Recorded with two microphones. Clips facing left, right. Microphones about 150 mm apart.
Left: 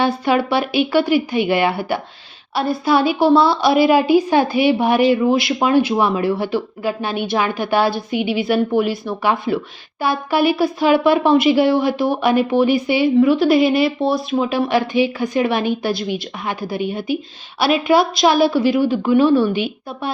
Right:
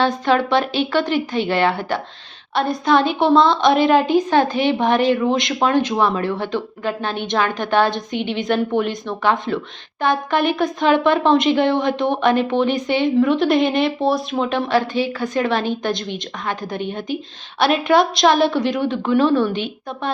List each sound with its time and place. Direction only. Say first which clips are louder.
0.0 s a woman's voice: even; 10° left (ahead or behind)